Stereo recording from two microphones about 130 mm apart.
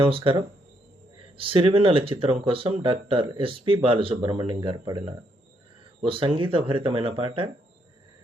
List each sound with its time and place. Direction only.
0.0 s speech: 45° right (ahead or behind)
1.4 s speech: 45° right (ahead or behind)
6.1 s speech: 40° right (ahead or behind)